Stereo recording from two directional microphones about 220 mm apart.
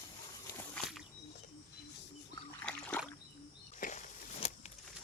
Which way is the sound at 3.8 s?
35° left (ahead or behind).